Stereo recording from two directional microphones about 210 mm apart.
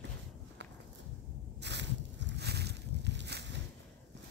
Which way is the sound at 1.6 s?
55° right (ahead or behind).